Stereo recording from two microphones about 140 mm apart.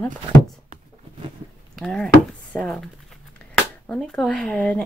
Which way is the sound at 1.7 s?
5° left (ahead or behind).